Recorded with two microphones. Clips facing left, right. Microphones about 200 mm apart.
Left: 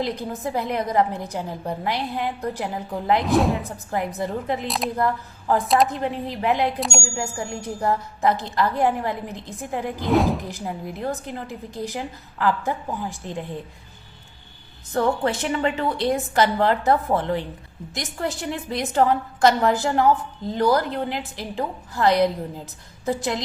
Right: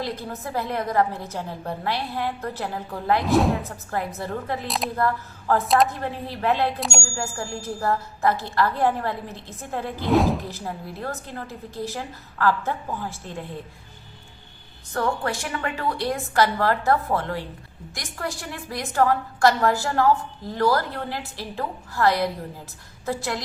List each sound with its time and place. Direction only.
0.0 s a woman's voice: 20° left (ahead or behind)
3.2 s speech: centre (ahead or behind)
3.7 s a woman's voice: 15° left (ahead or behind)
5.6 s speech: centre (ahead or behind)
5.9 s a woman's voice: 20° left (ahead or behind)
6.7 s speech: centre (ahead or behind)
7.0 s a woman's voice: 15° left (ahead or behind)
10.1 s speech: centre (ahead or behind)
10.4 s a woman's voice: 15° left (ahead or behind)
14.9 s a woman's voice: 20° left (ahead or behind)